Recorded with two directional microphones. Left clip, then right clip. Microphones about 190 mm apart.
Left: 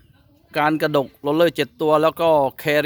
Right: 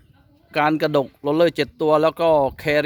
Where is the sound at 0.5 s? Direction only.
5° right (ahead or behind).